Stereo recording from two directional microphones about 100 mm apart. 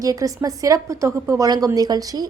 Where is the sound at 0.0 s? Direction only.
35° right (ahead or behind).